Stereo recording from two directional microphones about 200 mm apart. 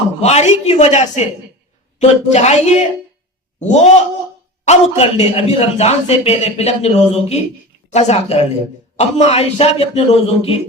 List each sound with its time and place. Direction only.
0.2 s a man's voice: 35° left (ahead or behind)